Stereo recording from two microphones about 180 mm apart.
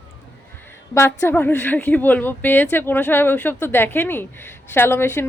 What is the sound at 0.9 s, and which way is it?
A woman's voice, 15° left (ahead or behind).